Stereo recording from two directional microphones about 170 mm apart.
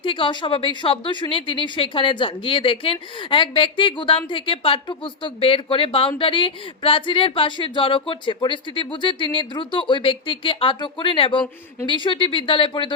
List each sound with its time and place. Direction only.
0.0 s speech: 30° left (ahead or behind)